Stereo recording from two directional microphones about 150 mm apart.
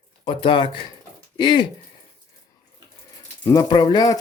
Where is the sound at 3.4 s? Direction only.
20° left (ahead or behind).